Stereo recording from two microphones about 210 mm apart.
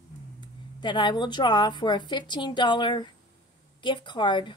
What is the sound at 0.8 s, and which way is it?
A woman's voice, 20° left (ahead or behind).